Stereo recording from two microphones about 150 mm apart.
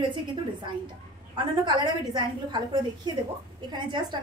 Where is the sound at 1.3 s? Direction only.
30° right (ahead or behind).